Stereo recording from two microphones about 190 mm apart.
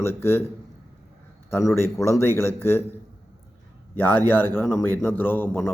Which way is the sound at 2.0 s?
15° left (ahead or behind).